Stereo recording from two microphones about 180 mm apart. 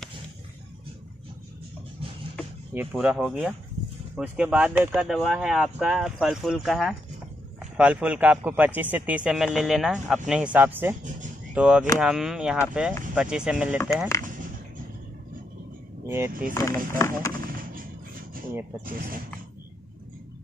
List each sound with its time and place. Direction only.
2.7 s speech: 10° right (ahead or behind)
16.1 s speech: 15° right (ahead or behind)
16.5 s speech: 15° left (ahead or behind)
17.3 s music: 50° right (ahead or behind)